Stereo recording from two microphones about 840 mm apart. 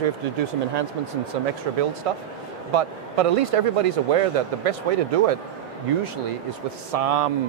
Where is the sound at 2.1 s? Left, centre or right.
Right.